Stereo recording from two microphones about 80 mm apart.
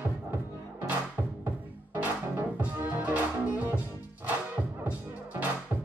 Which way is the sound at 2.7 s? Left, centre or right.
Right.